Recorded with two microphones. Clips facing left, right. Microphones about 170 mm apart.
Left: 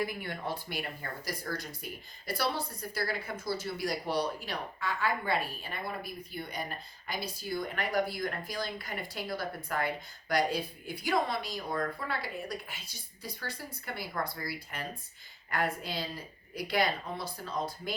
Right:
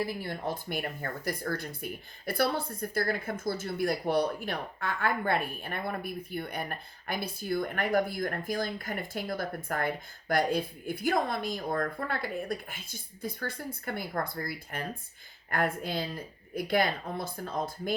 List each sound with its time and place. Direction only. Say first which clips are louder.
0.0 s speech: right 2 dB; 35° right (ahead or behind); by 17.9 s 50° right (ahead or behind)